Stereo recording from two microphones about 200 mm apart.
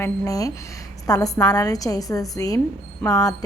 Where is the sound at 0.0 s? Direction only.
15° left (ahead or behind).